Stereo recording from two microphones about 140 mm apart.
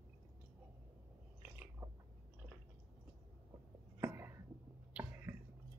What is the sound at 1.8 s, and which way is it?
Chewing, 20° right (ahead or behind).